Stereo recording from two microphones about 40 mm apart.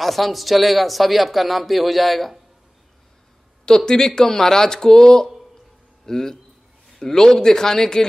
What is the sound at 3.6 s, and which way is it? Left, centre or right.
A man's voice, centre.